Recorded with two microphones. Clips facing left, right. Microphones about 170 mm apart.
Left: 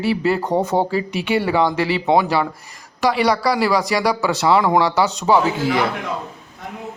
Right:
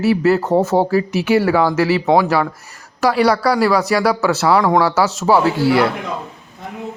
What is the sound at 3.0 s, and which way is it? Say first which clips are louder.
Speech: right 3 dB; centre (ahead or behind).